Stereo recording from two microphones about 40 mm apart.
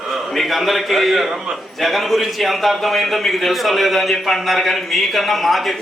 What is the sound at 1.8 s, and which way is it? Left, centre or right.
A man's voice, centre.